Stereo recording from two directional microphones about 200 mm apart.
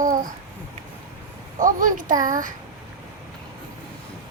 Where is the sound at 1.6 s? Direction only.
40° right (ahead or behind).